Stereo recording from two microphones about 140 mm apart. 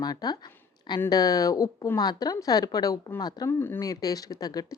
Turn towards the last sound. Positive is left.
turn(degrees=25)  # may be behind; listen again after turning